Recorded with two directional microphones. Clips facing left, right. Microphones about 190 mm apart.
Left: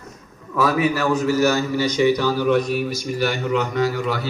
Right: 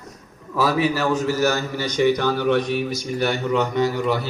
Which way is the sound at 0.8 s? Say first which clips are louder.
Left 1 dB; 40° right (ahead or behind).